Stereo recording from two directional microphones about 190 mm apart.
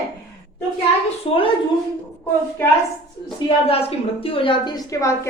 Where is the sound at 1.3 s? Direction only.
30° left (ahead or behind).